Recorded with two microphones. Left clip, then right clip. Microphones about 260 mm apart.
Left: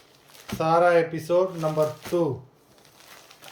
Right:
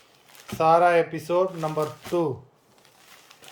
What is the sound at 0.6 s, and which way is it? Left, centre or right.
Speech, centre.